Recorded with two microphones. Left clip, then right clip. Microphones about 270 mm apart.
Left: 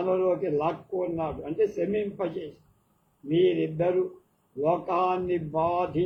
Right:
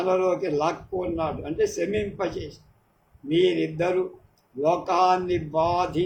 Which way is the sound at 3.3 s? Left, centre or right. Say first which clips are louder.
Right 2 dB; right.